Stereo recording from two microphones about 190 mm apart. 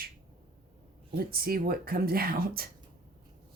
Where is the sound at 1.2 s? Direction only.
50° right (ahead or behind).